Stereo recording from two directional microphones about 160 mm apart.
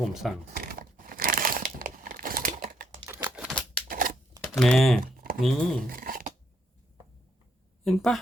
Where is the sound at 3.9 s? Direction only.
60° right (ahead or behind).